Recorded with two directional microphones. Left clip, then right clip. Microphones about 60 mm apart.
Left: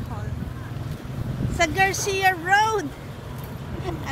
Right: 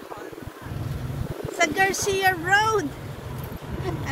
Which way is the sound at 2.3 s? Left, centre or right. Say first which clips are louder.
Left 1 dB; left.